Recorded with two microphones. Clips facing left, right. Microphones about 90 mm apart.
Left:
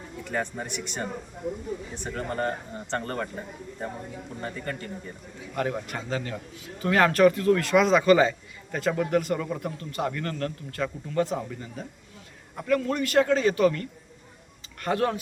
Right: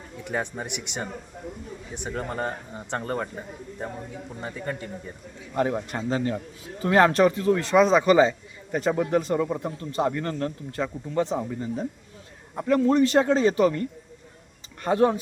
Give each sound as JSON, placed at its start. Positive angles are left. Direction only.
{"t": 0.3, "sound": "speech", "side_deg": -15}